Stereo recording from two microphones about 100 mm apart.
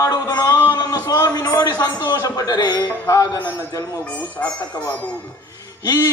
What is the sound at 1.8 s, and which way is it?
A woman's voice, 30° left (ahead or behind).